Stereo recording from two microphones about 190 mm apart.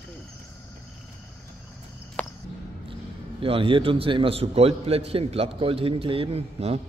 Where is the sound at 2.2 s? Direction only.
5° left (ahead or behind).